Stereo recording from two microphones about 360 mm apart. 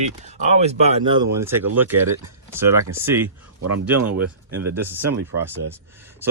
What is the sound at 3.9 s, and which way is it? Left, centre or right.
Speech, right.